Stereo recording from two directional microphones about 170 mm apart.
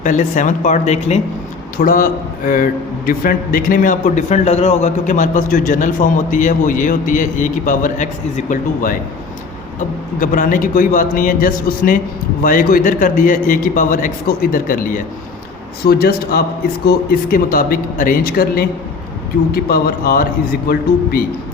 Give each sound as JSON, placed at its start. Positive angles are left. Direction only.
{"t": 0.0, "sound": "a man's voice", "side_deg": 45}
{"t": 1.8, "sound": "a man's voice", "side_deg": 55}
{"t": 10.2, "sound": "a man's voice", "side_deg": 50}